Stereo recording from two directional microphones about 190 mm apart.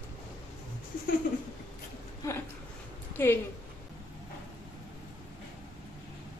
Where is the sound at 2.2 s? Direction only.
15° left (ahead or behind).